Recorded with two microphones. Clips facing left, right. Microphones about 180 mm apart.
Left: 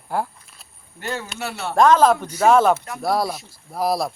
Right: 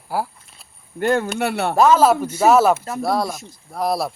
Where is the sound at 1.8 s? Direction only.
5° right (ahead or behind).